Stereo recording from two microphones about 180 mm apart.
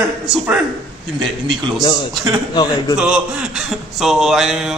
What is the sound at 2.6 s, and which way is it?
Speech, 25° left (ahead or behind).